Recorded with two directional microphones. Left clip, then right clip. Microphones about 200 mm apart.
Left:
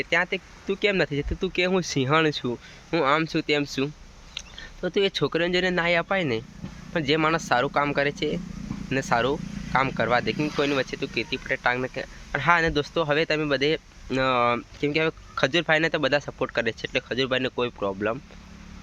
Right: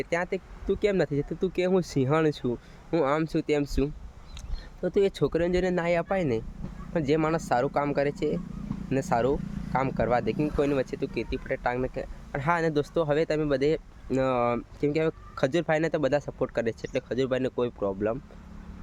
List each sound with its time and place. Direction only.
0.0 s speech: 10° right (ahead or behind)